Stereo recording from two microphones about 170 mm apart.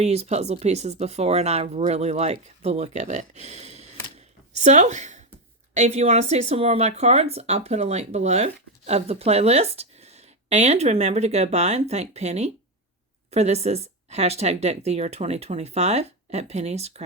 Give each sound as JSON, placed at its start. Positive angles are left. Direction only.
{"t": 0.0, "sound": "speech", "side_deg": -40}